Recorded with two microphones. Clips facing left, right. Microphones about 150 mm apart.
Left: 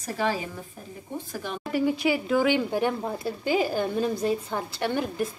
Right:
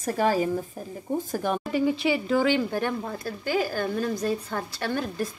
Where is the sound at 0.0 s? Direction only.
45° right (ahead or behind).